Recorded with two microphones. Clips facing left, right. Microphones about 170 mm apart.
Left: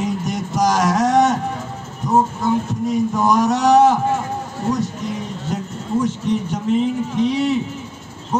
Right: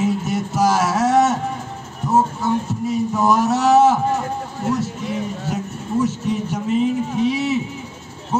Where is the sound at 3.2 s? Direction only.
5° right (ahead or behind).